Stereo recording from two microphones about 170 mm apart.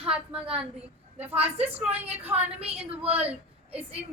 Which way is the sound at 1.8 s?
10° right (ahead or behind).